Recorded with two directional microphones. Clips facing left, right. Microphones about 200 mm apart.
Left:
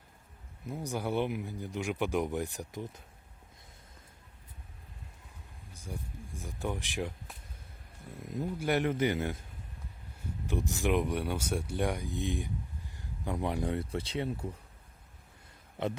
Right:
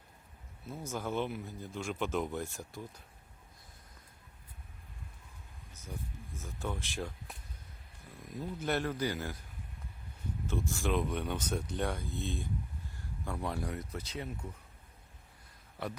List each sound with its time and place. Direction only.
0.6 s speech: 15° left (ahead or behind)
5.7 s speech: 10° left (ahead or behind)
8.1 s a man's voice: 25° left (ahead or behind)
8.5 s a man's voice: 15° left (ahead or behind)
10.4 s speech: 15° left (ahead or behind); by 14.6 s 30° left (ahead or behind)
15.8 s a man's voice: 20° left (ahead or behind)